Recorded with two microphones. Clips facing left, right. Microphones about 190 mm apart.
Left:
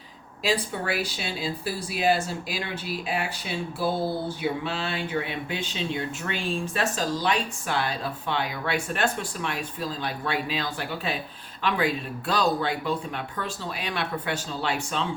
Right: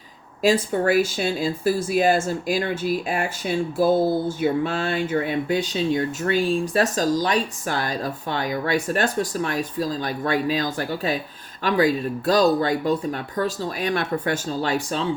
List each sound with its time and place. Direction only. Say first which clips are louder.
0.4 s speech: right 8 dB; 45° right (ahead or behind)